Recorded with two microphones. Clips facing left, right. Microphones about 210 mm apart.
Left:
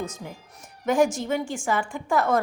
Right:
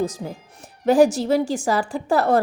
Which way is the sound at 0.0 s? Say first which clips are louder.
Right 8 dB; 35° right (ahead or behind).